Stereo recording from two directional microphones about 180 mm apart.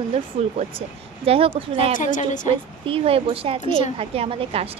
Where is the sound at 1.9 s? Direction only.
45° left (ahead or behind).